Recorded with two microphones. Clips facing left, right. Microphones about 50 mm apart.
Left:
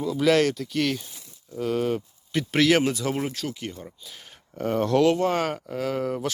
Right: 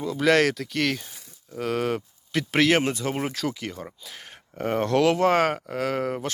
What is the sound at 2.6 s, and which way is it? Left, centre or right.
Speech, right.